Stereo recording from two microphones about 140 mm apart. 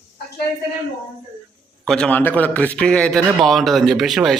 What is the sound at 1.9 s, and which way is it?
A man's voice, 5° left (ahead or behind).